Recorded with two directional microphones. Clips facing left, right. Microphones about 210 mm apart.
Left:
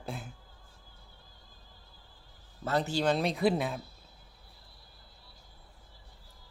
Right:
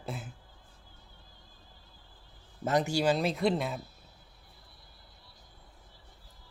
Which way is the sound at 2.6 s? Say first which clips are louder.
Right 2 dB; 15° right (ahead or behind).